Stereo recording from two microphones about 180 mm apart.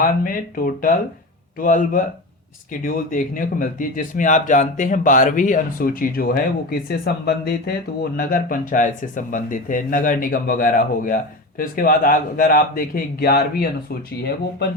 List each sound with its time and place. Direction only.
0.3 s speech: 50° left (ahead or behind)